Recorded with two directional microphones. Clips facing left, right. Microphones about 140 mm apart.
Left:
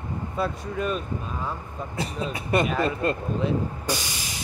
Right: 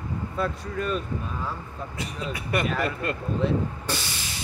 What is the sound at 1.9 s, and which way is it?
Speech, 25° left (ahead or behind).